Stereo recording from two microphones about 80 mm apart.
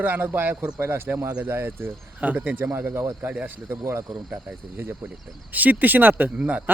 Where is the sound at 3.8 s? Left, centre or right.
Right.